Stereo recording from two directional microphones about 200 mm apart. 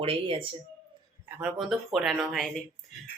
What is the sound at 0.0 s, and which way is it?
Speech, 30° right (ahead or behind).